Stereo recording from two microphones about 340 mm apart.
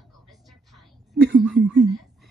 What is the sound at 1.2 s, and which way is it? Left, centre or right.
Speech, right.